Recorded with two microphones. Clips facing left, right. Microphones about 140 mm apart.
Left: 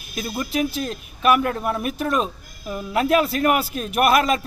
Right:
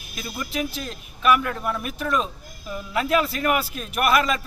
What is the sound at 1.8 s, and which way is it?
A man's voice, 45° left (ahead or behind).